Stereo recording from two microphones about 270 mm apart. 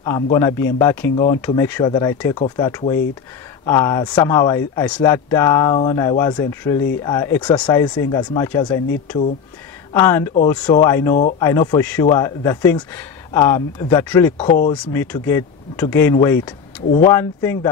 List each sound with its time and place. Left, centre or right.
0.0 s speech: centre
14.4 s speech: left
14.7 s speech: centre